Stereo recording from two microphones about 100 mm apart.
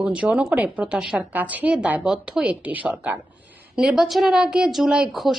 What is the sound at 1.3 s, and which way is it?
A woman's voice, 15° right (ahead or behind).